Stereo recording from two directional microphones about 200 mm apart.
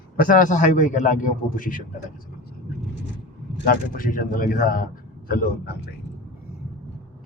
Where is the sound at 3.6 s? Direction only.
45° left (ahead or behind).